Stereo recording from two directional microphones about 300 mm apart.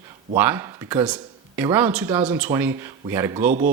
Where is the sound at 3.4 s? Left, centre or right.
Right.